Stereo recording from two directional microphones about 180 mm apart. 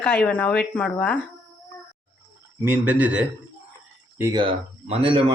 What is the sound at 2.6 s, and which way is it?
Speech, 10° right (ahead or behind).